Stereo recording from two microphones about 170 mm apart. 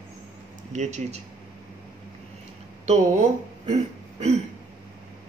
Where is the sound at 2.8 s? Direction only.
40° right (ahead or behind).